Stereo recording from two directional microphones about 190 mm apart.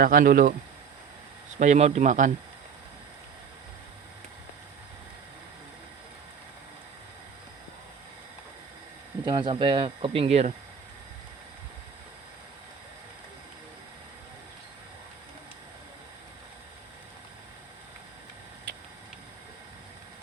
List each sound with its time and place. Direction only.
0.0 s speech: 50° right (ahead or behind)
1.5 s speech: 40° right (ahead or behind)
9.2 s speech: 25° right (ahead or behind)